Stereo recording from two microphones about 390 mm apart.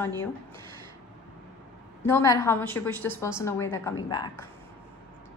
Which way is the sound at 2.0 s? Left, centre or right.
Centre.